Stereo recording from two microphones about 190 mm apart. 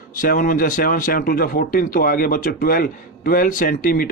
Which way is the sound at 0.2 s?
45° left (ahead or behind).